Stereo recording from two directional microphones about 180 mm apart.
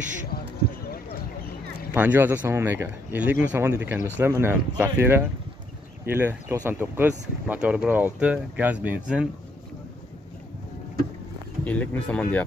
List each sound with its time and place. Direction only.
0.3 s basketball bounce: 55° left (ahead or behind)
2.0 s speech: 10° right (ahead or behind)
11.6 s speech: 10° left (ahead or behind)